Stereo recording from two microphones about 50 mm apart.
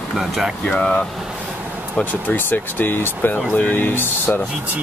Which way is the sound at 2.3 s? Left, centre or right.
Left.